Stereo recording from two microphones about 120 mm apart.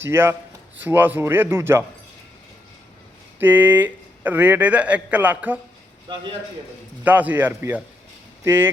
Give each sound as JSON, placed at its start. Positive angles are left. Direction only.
{"t": 0.0, "sound": "speech", "side_deg": -20}
{"t": 3.3, "sound": "speech", "side_deg": -15}
{"t": 7.0, "sound": "speech", "side_deg": -15}